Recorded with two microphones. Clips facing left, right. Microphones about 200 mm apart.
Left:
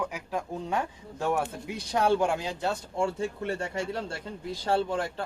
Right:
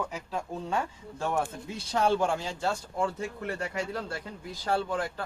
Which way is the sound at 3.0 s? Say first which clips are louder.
Left 4 dB; 30° left (ahead or behind).